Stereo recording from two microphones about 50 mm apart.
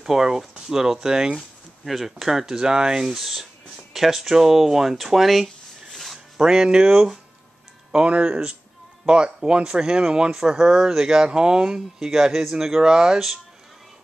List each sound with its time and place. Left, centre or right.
0.0 s speech: centre
1.9 s speech: centre
6.3 s speech: centre